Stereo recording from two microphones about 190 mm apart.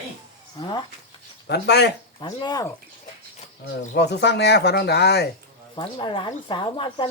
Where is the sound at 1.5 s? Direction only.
60° left (ahead or behind).